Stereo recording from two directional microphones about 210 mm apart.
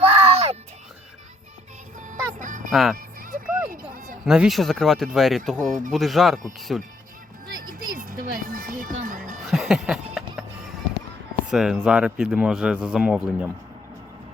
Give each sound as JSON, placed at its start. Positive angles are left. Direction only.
{"t": 0.0, "sound": "music", "side_deg": -30}
{"t": 2.0, "sound": "music", "side_deg": -40}
{"t": 3.9, "sound": "a sound", "side_deg": -40}
{"t": 4.3, "sound": "speech", "side_deg": 0}
{"t": 7.6, "sound": "music", "side_deg": -40}
{"t": 9.5, "sound": "a sound", "side_deg": 0}
{"t": 11.4, "sound": "speech", "side_deg": 0}